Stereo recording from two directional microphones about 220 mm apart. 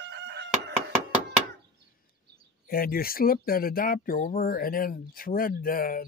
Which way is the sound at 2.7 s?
40° left (ahead or behind).